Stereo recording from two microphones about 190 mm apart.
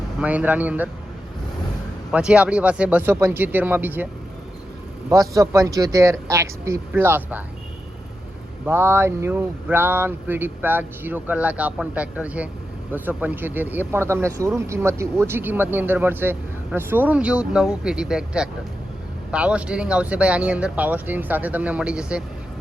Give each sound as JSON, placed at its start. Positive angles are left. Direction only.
{"t": 0.2, "sound": "speech", "side_deg": -10}
{"t": 2.0, "sound": "speech", "side_deg": -5}
{"t": 8.6, "sound": "speech", "side_deg": -10}